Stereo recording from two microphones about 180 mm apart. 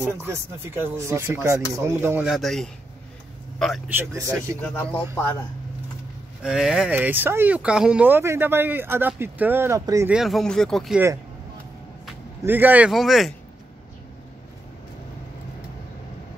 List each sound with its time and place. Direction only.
0.0 s speech: 15° right (ahead or behind)
4.1 s speech: 15° right (ahead or behind)
4.6 s speech: 5° left (ahead or behind)
6.4 s speech: 5° right (ahead or behind)
10.1 s speech: centre (ahead or behind)
12.4 s speech: 10° right (ahead or behind)